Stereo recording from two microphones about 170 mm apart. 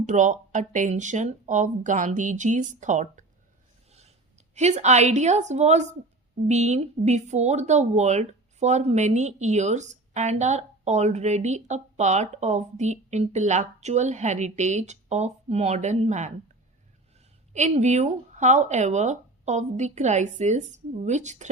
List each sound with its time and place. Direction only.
0.0 s speech: 45° right (ahead or behind)
4.5 s speech: 40° right (ahead or behind)
17.5 s speech: 40° right (ahead or behind)